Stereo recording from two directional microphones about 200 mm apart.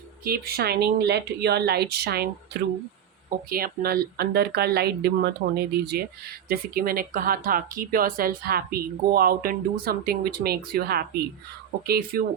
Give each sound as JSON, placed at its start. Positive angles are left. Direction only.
{"t": 0.3, "sound": "speech", "side_deg": -50}